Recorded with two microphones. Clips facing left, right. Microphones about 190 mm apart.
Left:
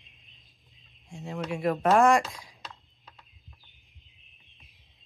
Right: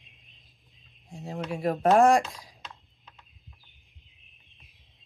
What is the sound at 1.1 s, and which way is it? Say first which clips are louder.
Speech: even; 35° right (ahead or behind).